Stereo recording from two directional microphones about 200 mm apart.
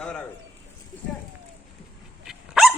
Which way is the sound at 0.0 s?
5° left (ahead or behind).